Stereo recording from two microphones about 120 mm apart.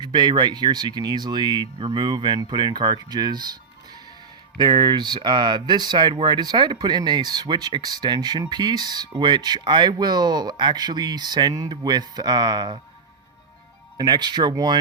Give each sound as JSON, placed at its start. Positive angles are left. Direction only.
{"t": 0.0, "sound": "speech", "side_deg": -40}
{"t": 13.9, "sound": "speech", "side_deg": -35}